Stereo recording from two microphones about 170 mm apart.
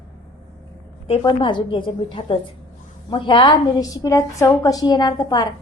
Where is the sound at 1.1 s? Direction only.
30° left (ahead or behind).